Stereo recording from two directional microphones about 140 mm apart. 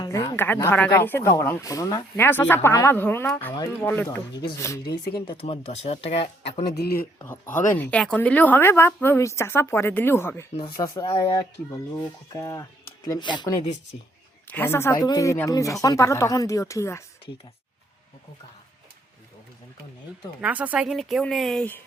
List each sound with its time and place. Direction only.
0.0 s a sound: 30° left (ahead or behind)
0.3 s speech: 15° left (ahead or behind)
2.1 s speech: 15° left (ahead or behind)
5.2 s speech: 40° left (ahead or behind)
7.8 s speech: 10° left (ahead or behind); by 13.6 s 30° left (ahead or behind)
14.5 s speech: 15° left (ahead or behind)
14.9 s speech: 30° left (ahead or behind)
20.4 s speech: 10° right (ahead or behind)